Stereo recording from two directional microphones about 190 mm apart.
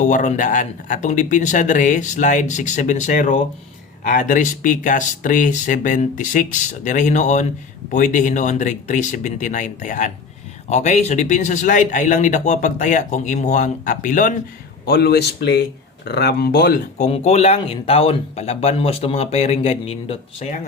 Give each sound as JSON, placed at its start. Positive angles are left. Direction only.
{"t": 0.0, "sound": "a man's voice", "side_deg": 40}
{"t": 14.8, "sound": "speech", "side_deg": 55}
{"t": 17.0, "sound": "a man's voice", "side_deg": 35}